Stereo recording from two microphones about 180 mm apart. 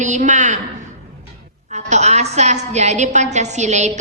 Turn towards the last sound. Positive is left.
turn(degrees=-40)  # may be behind; listen again after turning